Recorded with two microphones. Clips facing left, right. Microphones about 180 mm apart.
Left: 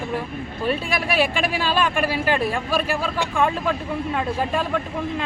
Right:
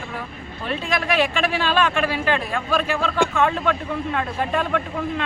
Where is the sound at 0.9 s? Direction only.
10° left (ahead or behind).